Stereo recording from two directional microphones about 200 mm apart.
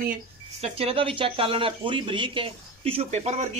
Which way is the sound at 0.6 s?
30° right (ahead or behind).